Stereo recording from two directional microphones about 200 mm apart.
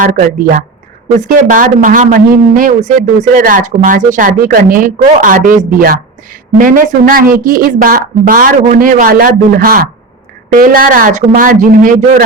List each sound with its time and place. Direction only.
0.0 s a man's voice: 45° right (ahead or behind)